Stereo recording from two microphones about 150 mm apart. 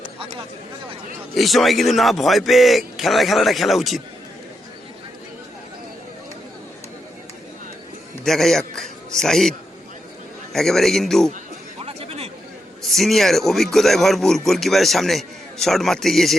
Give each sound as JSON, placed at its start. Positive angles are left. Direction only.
{"t": 1.4, "sound": "speech", "side_deg": 0}
{"t": 8.2, "sound": "a man's voice", "side_deg": 0}
{"t": 11.8, "sound": "chatter", "side_deg": -40}
{"t": 12.8, "sound": "speech", "side_deg": 0}